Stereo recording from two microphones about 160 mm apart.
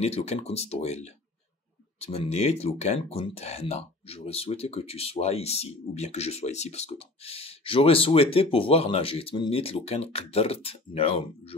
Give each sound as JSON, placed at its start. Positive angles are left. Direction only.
{"t": 0.0, "sound": "speech", "side_deg": 40}